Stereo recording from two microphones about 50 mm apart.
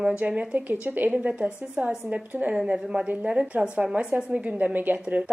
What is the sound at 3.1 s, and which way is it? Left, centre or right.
A woman's voice, right.